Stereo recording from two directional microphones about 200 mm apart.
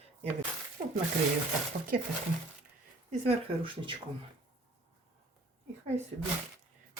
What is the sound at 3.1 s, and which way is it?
Speech, 30° right (ahead or behind).